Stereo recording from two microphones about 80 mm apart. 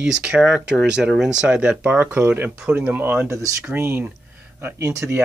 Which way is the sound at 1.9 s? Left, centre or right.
Right.